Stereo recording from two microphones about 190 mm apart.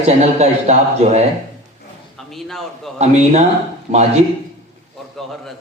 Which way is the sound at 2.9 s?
35° right (ahead or behind).